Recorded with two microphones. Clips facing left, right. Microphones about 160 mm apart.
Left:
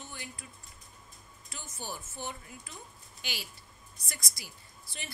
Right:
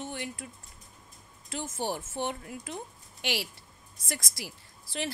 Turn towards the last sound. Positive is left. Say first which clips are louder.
# right 11 dB
turn(degrees=-90)